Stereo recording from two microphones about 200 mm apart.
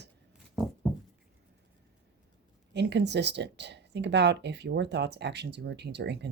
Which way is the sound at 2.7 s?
60° right (ahead or behind).